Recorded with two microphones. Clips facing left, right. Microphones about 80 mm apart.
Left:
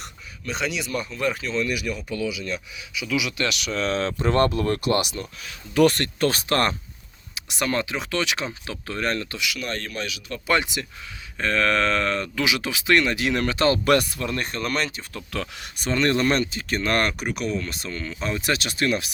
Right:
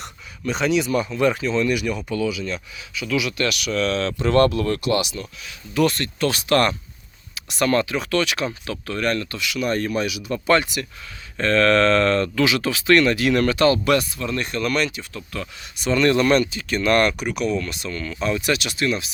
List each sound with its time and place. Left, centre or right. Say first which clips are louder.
0.0 s speech: right 7 dB; centre; by 4.8 s left
4.8 s speech: right 1 dB; left
6.2 s speech: right 3 dB; left
7.3 s speech: right 5 dB; centre
9.6 s speech: right 8 dB; centre
10.6 s speech: right 2 dB; centre
13.8 s speech: even; left
14.2 s speech: right 3 dB; left
15.3 s speech: left 4 dB; left
15.8 s speech: right 4 dB; left